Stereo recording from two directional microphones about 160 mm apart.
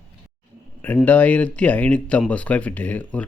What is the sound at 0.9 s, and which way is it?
A man's voice, 10° left (ahead or behind).